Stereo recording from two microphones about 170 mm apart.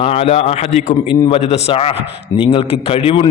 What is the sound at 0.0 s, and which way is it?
A man's voice, 35° left (ahead or behind).